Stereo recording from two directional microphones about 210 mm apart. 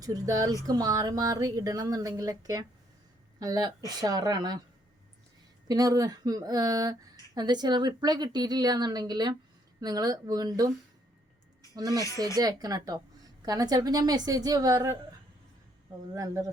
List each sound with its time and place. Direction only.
0.0 s speech: 15° right (ahead or behind)
5.6 s a woman's voice: 15° right (ahead or behind)
11.7 s speech: 15° right (ahead or behind)
16.1 s speech: 15° right (ahead or behind)